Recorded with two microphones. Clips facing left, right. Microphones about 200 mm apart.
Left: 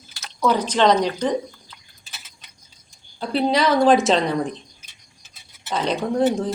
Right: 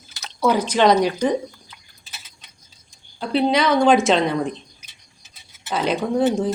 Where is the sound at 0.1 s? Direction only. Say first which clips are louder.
Right 2 dB; 20° right (ahead or behind).